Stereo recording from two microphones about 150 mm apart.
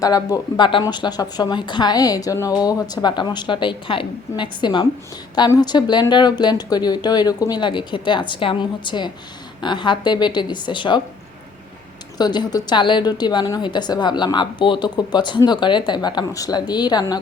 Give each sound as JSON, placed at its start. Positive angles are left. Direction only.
{"t": 0.0, "sound": "a woman's voice", "side_deg": 25}
{"t": 12.1, "sound": "a woman's voice", "side_deg": 30}